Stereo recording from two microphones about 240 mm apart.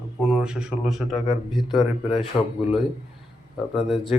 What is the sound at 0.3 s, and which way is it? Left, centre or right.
Speech, centre.